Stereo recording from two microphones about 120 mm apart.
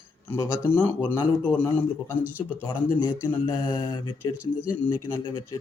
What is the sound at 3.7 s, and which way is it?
Mantra, 35° left (ahead or behind).